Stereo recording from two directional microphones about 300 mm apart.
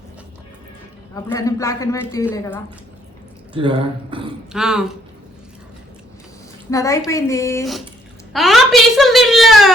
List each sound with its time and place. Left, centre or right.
1.1 s a man's voice: centre
3.5 s speech: centre
4.5 s speech: centre
6.7 s a man's voice: centre